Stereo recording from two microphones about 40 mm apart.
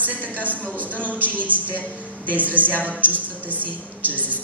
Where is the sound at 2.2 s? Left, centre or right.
Right.